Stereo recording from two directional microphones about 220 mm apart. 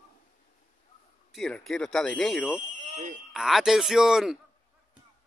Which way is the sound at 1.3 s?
Centre (ahead or behind).